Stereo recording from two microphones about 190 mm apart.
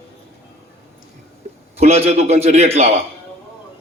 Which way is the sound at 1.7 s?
35° right (ahead or behind).